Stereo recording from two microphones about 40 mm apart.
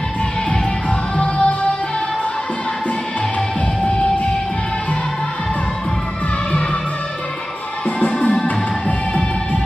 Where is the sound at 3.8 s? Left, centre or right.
Left.